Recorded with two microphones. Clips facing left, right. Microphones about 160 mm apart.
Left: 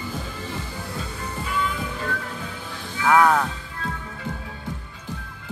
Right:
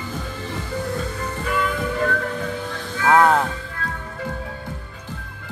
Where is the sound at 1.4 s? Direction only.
55° right (ahead or behind).